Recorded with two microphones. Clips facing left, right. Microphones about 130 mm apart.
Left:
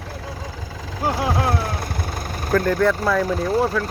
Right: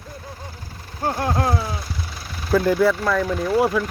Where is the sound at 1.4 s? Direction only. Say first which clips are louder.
Even; centre (ahead or behind).